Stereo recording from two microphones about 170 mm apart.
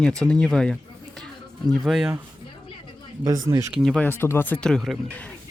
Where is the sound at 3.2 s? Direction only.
20° right (ahead or behind).